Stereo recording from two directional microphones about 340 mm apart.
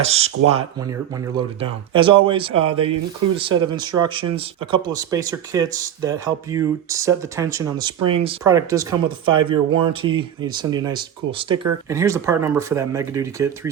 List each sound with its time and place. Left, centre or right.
0.0 s speech: centre